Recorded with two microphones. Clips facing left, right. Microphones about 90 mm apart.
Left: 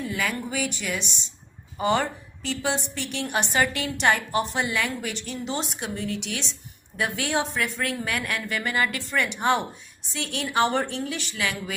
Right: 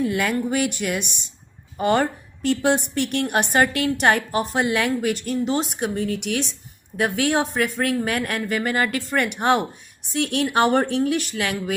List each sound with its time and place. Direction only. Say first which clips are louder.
0.0 s a woman's voice: right 7 dB; 60° right (ahead or behind)